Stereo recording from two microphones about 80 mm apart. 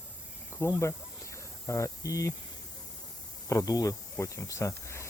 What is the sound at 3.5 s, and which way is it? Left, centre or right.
Speech, left.